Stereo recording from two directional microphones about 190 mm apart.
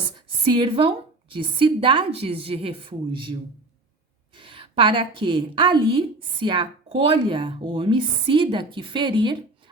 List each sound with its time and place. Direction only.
0.5 s a woman's voice: 25° right (ahead or behind)
4.4 s a woman's voice: 25° right (ahead or behind)